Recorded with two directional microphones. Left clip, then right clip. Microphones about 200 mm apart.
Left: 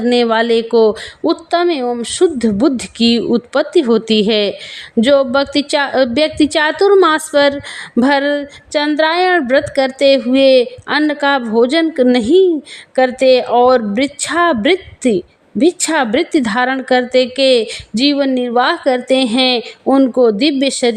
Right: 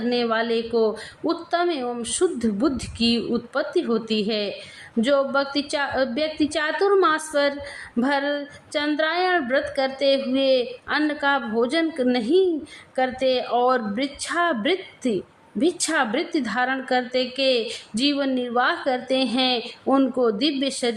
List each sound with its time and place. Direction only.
0.0 s a woman's voice: 45° left (ahead or behind)